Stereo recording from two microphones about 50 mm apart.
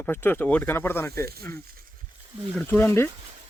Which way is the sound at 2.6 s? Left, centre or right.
Left.